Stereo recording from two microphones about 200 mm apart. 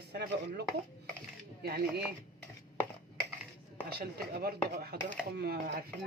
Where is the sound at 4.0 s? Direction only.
50° right (ahead or behind).